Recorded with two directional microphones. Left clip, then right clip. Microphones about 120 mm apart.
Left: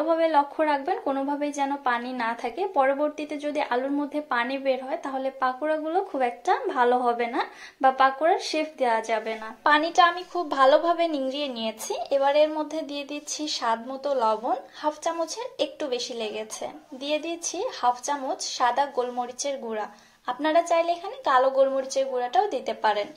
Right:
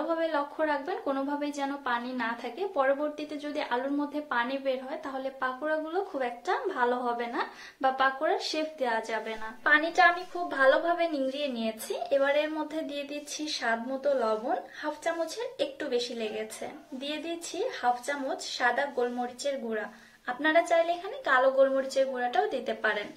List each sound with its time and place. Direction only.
0.1 s a woman's voice: 25° left (ahead or behind)
9.6 s a woman's voice: 40° left (ahead or behind)